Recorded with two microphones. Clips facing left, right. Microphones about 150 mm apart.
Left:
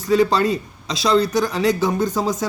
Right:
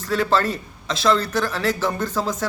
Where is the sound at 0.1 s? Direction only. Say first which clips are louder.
Left 4 dB; 15° left (ahead or behind).